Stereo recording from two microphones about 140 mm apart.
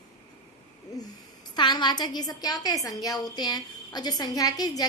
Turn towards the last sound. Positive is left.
turn(degrees=25)  # may be behind; listen again after turning